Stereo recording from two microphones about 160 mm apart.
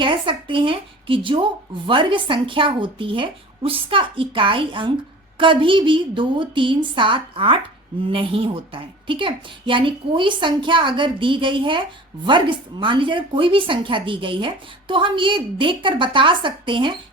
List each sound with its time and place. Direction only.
0.0 s speech: 30° right (ahead or behind)